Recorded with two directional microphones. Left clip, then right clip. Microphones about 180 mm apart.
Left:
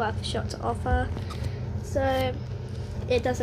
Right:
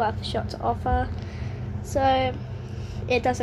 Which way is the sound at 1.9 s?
20° right (ahead or behind).